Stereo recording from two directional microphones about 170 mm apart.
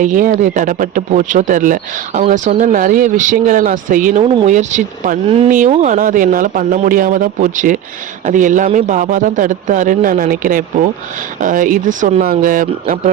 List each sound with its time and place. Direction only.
0.0 s a man's voice: 50° right (ahead or behind)
2.2 s a man's voice: 40° right (ahead or behind)